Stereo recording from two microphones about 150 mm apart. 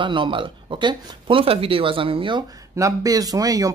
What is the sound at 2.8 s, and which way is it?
Speech, 25° right (ahead or behind).